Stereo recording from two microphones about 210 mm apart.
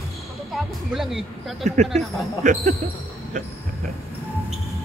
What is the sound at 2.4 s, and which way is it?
Speech, 35° right (ahead or behind).